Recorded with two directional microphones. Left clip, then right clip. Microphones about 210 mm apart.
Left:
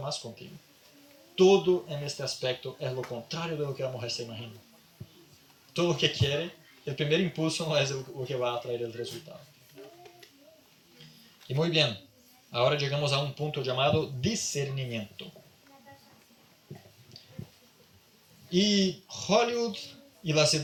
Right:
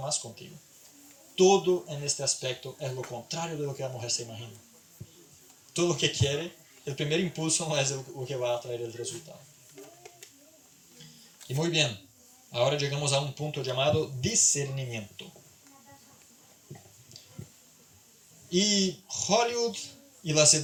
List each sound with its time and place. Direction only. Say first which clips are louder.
1.4 s speech: even; 50° right (ahead or behind)
5.7 s speech: even; 50° right (ahead or behind)
9.8 s a sound: left 1 dB; 50° right (ahead or behind)
11.4 s speech: left 1 dB; 50° right (ahead or behind)
18.4 s speech: even; 50° right (ahead or behind)